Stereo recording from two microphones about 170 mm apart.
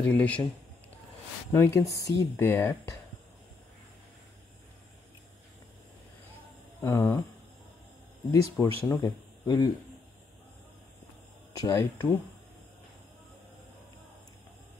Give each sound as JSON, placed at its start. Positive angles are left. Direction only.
{"t": 0.0, "sound": "speech", "side_deg": 10}
{"t": 6.8, "sound": "speech", "side_deg": 20}
{"t": 8.3, "sound": "speech", "side_deg": 20}
{"t": 11.5, "sound": "speech", "side_deg": 20}